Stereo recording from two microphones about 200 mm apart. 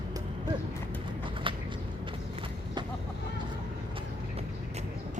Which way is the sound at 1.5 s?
25° right (ahead or behind).